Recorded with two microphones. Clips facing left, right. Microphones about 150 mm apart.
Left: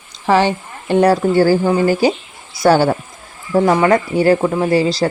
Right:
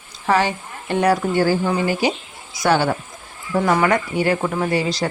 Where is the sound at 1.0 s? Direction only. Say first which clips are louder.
Left 4 dB; 35° left (ahead or behind).